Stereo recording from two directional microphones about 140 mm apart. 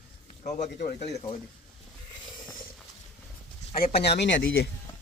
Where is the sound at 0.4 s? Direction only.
60° left (ahead or behind).